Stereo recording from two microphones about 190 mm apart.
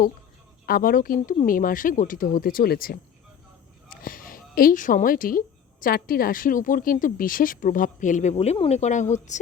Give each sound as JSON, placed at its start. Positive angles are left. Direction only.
{"t": 0.6, "sound": "a woman's voice", "side_deg": 50}
{"t": 3.8, "sound": "a sound", "side_deg": 50}
{"t": 5.8, "sound": "a woman's voice", "side_deg": 50}